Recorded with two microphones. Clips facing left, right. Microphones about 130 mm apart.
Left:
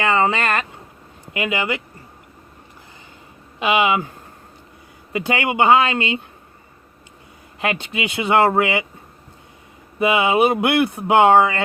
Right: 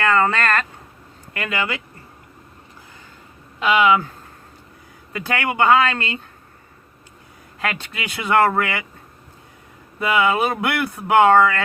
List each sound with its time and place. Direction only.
0.0 s speech: 15° left (ahead or behind)
3.7 s speech: 15° left (ahead or behind)
5.1 s speech: 20° left (ahead or behind)
7.6 s speech: 20° left (ahead or behind)
10.0 s speech: 20° left (ahead or behind)